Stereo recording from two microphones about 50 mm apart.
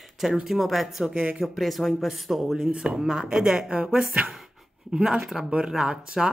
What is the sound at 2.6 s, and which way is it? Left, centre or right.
A woman's voice, centre.